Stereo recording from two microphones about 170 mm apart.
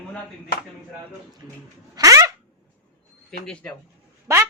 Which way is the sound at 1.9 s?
20° right (ahead or behind).